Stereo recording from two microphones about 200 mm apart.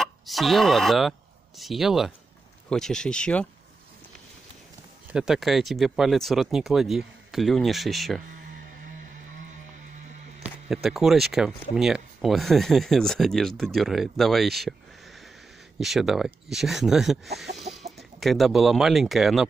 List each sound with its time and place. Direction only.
0.0 s speech: centre (ahead or behind)
5.1 s speech: 5° right (ahead or behind)
10.7 s speech: centre (ahead or behind)
15.8 s speech: centre (ahead or behind)